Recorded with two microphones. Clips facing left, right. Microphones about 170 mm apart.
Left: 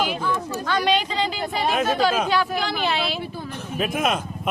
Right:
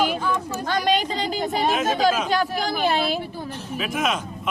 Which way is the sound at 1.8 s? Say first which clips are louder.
Even; 45° right (ahead or behind).